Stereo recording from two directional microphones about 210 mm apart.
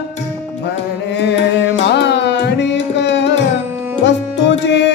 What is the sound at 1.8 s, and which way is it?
Music, 55° left (ahead or behind).